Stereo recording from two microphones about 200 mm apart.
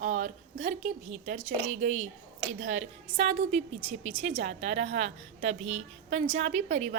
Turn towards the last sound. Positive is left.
turn(degrees=-35)  # may be behind; listen again after turning